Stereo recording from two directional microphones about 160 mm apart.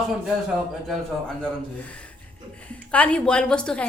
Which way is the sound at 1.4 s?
10° left (ahead or behind).